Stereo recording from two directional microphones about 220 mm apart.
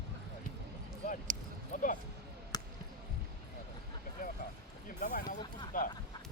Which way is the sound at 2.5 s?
20° left (ahead or behind).